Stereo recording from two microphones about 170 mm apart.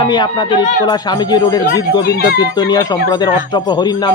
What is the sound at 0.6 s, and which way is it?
Speech, 50° left (ahead or behind).